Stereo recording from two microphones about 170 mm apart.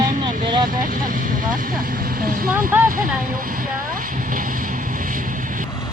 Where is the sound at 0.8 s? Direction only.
55° right (ahead or behind).